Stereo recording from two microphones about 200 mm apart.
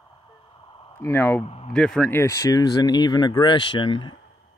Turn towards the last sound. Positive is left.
turn(degrees=25)  # may be behind; listen again after turning